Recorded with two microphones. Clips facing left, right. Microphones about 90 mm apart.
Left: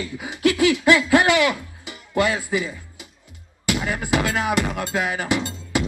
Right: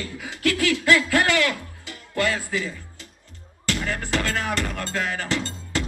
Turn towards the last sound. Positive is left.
turn(degrees=15)  # may be behind; listen again after turning